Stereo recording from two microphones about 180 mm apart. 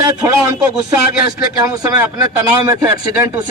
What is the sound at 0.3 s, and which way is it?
A man's voice, 20° right (ahead or behind).